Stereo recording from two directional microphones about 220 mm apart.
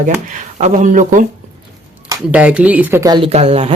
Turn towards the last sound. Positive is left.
turn(degrees=-30)  # may be behind; listen again after turning